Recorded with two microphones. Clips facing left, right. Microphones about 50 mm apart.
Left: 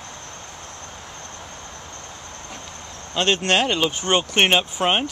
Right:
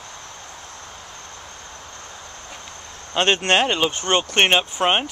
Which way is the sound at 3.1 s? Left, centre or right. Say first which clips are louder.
Right 2 dB; right.